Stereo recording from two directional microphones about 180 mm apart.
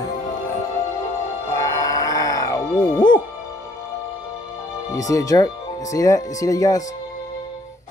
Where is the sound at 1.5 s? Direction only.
20° left (ahead or behind).